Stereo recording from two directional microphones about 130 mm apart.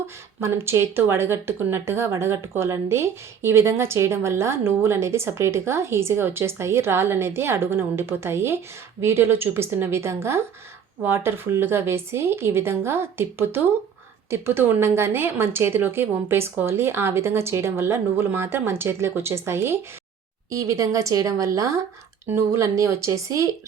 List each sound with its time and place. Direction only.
0.3 s speech: 20° right (ahead or behind)